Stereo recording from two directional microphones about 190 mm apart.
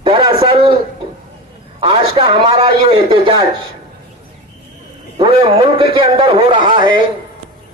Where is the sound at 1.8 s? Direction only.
30° right (ahead or behind).